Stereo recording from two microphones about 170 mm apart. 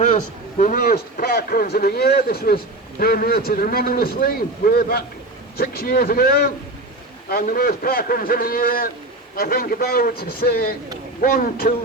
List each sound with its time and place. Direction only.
0.6 s speech: 55° left (ahead or behind)